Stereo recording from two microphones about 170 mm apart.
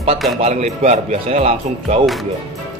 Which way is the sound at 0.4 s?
40° right (ahead or behind).